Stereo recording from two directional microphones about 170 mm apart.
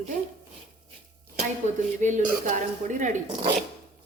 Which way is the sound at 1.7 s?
45° right (ahead or behind).